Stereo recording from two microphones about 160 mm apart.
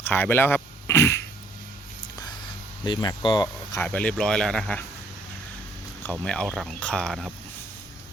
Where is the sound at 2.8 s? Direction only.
30° left (ahead or behind).